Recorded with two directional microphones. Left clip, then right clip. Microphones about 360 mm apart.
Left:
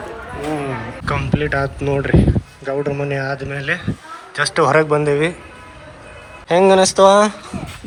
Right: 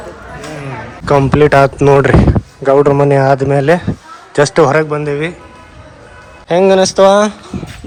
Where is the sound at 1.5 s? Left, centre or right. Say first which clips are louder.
Right 11 dB; right.